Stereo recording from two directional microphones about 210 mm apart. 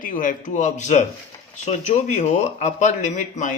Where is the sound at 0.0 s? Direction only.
40° left (ahead or behind).